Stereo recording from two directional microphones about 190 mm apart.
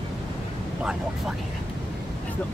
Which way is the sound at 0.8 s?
5° right (ahead or behind).